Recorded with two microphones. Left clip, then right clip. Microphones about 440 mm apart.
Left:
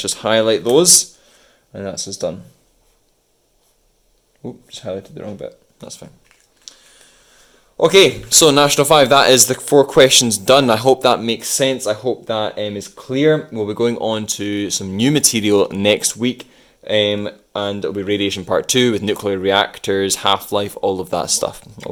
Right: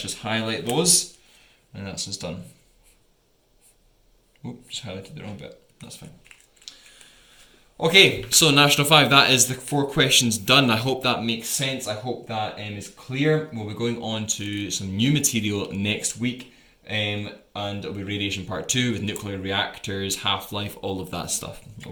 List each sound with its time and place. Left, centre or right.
0.0 s speech: centre
4.8 s speech: centre
5.9 s typing: centre
7.8 s a man's voice: centre